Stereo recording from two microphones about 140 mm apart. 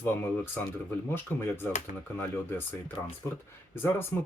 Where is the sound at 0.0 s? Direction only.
15° left (ahead or behind).